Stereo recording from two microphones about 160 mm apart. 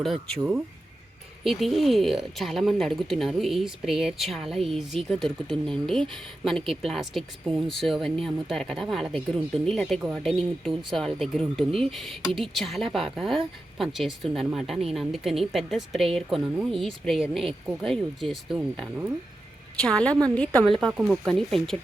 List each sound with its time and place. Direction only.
0.0 s speech: centre (ahead or behind)